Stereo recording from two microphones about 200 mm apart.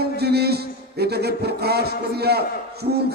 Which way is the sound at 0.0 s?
55° right (ahead or behind).